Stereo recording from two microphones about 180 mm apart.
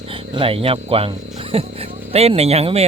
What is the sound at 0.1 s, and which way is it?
Speech, 30° right (ahead or behind).